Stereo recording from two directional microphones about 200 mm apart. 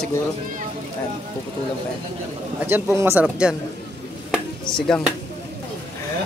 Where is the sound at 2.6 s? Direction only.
10° right (ahead or behind).